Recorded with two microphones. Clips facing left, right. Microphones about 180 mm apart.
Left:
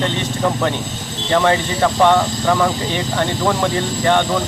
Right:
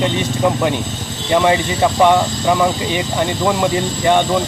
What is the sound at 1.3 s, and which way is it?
Speech, 10° right (ahead or behind).